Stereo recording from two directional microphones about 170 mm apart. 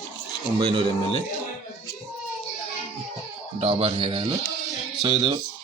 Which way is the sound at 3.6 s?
35° right (ahead or behind).